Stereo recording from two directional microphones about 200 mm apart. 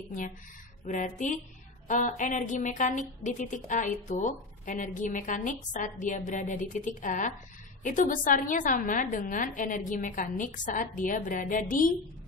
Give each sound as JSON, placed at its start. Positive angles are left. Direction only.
{"t": 0.8, "sound": "a woman's voice", "side_deg": 40}